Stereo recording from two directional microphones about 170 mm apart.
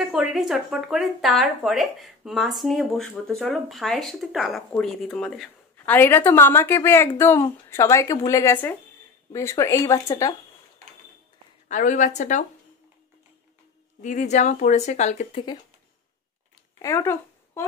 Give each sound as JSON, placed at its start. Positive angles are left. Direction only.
{"t": 0.0, "sound": "speech", "side_deg": 0}
{"t": 11.7, "sound": "speech", "side_deg": 50}
{"t": 14.0, "sound": "speech", "side_deg": 45}
{"t": 16.8, "sound": "speech", "side_deg": 15}